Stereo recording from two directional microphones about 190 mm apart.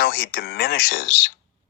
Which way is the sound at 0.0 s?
55° left (ahead or behind).